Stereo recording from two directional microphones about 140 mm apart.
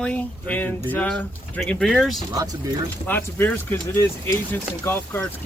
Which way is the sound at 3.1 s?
15° left (ahead or behind).